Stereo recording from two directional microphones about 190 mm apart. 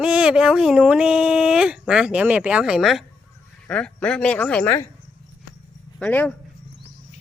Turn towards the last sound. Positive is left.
turn(degrees=5)  # may be behind; listen again after turning